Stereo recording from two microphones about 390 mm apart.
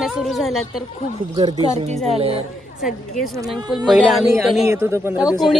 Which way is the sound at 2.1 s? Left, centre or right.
Centre.